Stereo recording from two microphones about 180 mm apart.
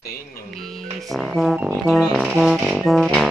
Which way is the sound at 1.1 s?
Centre (ahead or behind).